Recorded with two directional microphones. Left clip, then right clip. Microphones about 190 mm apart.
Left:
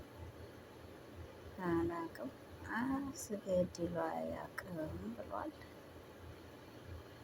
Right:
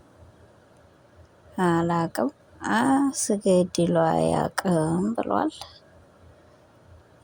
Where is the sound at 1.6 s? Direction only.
55° right (ahead or behind).